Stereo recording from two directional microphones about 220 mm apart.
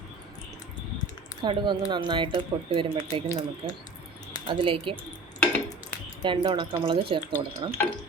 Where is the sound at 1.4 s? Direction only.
20° right (ahead or behind).